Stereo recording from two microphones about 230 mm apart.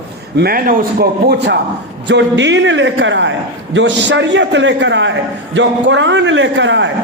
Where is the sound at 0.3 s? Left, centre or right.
Right.